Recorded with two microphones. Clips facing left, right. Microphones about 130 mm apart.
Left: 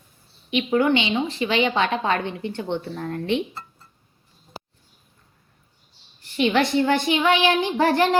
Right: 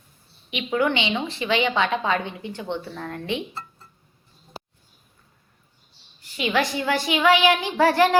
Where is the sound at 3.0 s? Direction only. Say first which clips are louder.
Left 4 dB; 30° left (ahead or behind).